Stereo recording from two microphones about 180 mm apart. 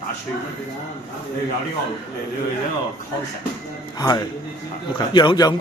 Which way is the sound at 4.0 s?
20° left (ahead or behind).